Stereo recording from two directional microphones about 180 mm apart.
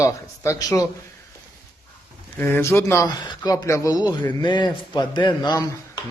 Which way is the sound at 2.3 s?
15° left (ahead or behind).